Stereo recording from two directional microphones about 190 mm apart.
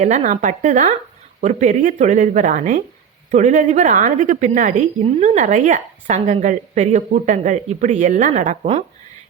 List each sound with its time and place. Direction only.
0.0 s a woman's voice: 40° right (ahead or behind)